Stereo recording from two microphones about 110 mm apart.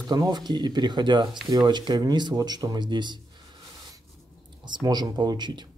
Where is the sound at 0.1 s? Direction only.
40° right (ahead or behind).